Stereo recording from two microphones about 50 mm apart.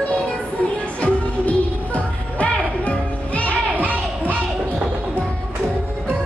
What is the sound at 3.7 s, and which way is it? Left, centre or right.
Music, right.